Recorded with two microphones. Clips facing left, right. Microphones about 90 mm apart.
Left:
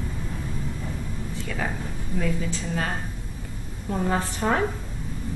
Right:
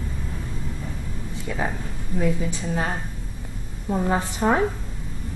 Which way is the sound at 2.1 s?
15° right (ahead or behind).